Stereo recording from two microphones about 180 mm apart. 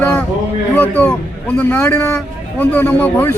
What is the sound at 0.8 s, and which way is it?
A man's voice, 10° left (ahead or behind).